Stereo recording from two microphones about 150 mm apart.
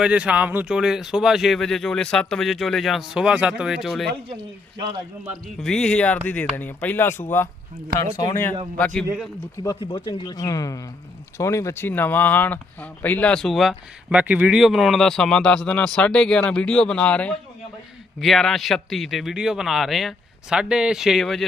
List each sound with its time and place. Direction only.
0.0 s speech: 10° right (ahead or behind)
5.5 s speech: 5° left (ahead or behind)
8.8 s speech: 10° left (ahead or behind)
9.6 s a man's voice: 35° left (ahead or behind); by 21.4 s centre (ahead or behind)